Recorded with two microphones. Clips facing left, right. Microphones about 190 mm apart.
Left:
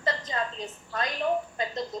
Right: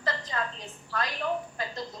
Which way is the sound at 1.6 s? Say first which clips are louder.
Left 4 dB; 25° left (ahead or behind).